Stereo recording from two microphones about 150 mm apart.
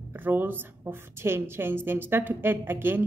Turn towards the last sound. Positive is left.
turn(degrees=-15)  # may be behind; listen again after turning